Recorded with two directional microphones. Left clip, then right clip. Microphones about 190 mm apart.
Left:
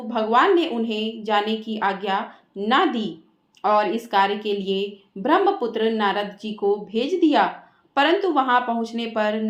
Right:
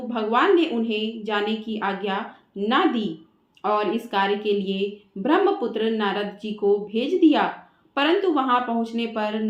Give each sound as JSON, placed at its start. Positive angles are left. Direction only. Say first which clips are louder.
{"t": 0.1, "sound": "speech", "louder": "left 2 dB", "side_deg": 30}